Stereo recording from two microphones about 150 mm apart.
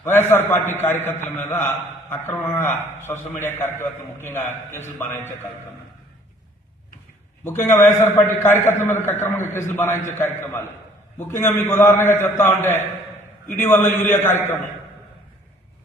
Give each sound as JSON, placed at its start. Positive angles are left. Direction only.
{"t": 0.0, "sound": "a man's voice", "side_deg": 15}
{"t": 7.4, "sound": "a man's voice", "side_deg": 15}